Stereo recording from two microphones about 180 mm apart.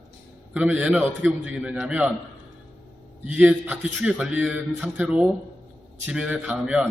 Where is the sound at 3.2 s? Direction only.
10° right (ahead or behind).